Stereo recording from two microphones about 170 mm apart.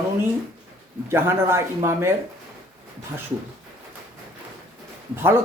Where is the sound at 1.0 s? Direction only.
15° right (ahead or behind).